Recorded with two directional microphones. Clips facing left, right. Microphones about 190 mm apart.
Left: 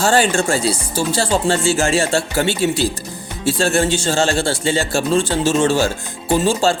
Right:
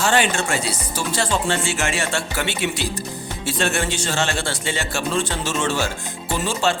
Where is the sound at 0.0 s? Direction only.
35° left (ahead or behind).